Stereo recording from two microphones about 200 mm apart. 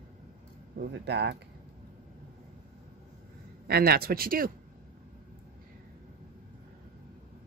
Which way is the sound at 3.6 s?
50° right (ahead or behind).